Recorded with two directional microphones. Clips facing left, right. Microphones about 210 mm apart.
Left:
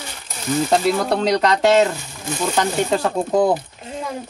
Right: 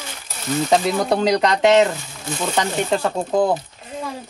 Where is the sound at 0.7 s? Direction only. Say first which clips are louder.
Right 1 dB; centre (ahead or behind).